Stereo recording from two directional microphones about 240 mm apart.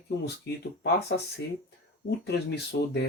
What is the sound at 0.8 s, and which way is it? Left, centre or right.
Speech, left.